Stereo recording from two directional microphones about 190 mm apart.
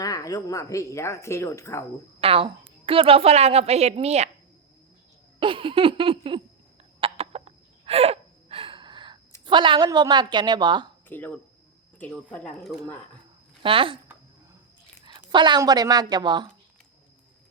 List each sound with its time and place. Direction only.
0.0 s speech: 20° left (ahead or behind)
2.2 s a woman's voice: 30° right (ahead or behind)
5.4 s a woman's voice: 25° right (ahead or behind)
7.0 s gasp: 30° right (ahead or behind)
9.5 s a woman's voice: 25° right (ahead or behind)
11.1 s speech: 10° left (ahead or behind)
13.6 s a woman's voice: 30° right (ahead or behind)
15.0 s speech: 25° right (ahead or behind)